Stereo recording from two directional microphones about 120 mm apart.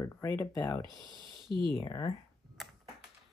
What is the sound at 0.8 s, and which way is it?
Speech, 40° right (ahead or behind).